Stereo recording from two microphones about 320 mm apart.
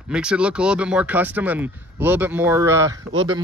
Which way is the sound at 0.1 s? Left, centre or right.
Centre.